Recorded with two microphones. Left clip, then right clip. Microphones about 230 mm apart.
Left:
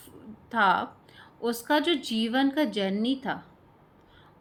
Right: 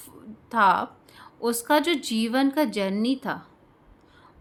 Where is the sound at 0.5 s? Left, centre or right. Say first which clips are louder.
Right 3 dB; right.